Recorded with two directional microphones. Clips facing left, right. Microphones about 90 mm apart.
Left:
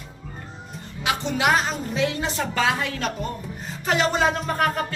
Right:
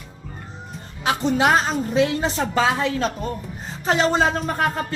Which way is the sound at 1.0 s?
35° right (ahead or behind).